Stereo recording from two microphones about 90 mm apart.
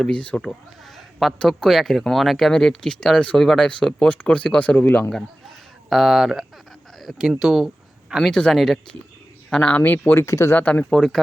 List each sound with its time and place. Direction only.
0.0 s speech: 15° left (ahead or behind)
1.4 s speech: 5° left (ahead or behind); by 5.1 s 20° left (ahead or behind)
5.9 s speech: centre (ahead or behind)
8.3 s speech: 10° left (ahead or behind); by 10.2 s 25° left (ahead or behind)
10.2 s speech: 35° left (ahead or behind)
10.5 s speech: 20° left (ahead or behind)
10.8 s speech: 5° left (ahead or behind)